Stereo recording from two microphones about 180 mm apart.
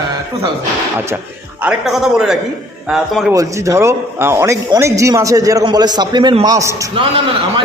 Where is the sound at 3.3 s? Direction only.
15° right (ahead or behind).